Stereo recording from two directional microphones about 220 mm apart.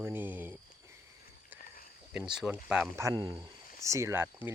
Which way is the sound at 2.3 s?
5° right (ahead or behind).